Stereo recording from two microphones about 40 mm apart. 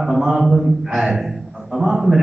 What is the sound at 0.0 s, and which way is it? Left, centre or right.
A man's voice, centre.